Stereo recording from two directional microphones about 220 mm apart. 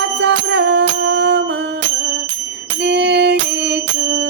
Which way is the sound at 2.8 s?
50° right (ahead or behind).